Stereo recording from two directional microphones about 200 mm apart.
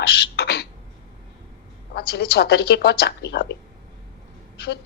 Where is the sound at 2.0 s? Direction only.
55° left (ahead or behind).